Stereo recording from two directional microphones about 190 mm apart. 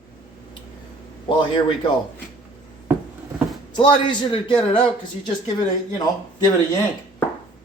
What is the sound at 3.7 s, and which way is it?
A man's voice, 25° left (ahead or behind).